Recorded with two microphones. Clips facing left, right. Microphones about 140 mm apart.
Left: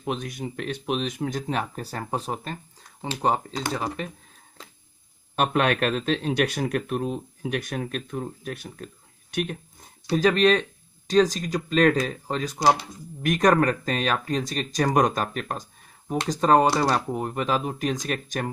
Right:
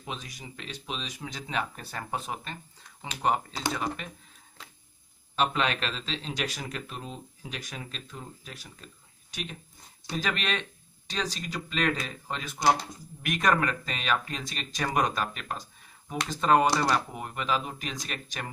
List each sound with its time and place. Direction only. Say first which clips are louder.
0.0 s speech: left 10 dB; 55° left (ahead or behind); by 4.1 s 35° left (ahead or behind)
5.4 s speech: left 6 dB; 55° left (ahead or behind)
10.1 s speech: left 12 dB; 40° left (ahead or behind)
16.7 s speech: left 3 dB; 25° left (ahead or behind)
17.1 s speech: left 6 dB; 35° left (ahead or behind)